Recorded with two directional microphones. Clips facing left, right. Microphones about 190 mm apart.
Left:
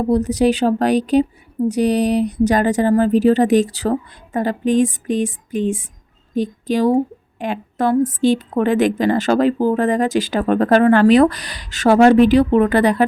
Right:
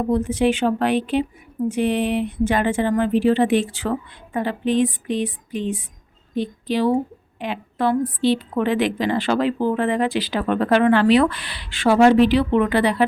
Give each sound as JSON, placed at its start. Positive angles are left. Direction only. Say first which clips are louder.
{"t": 0.1, "sound": "a woman's voice", "louder": "left 4 dB", "side_deg": 40}